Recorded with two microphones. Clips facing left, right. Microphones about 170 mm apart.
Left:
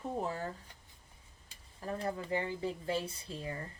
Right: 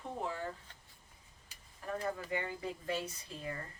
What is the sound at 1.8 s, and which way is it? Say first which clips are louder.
Speech: left 1 dB; 35° left (ahead or behind).